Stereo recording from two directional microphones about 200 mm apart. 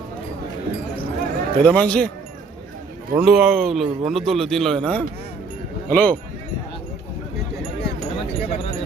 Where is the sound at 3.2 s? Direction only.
5° right (ahead or behind).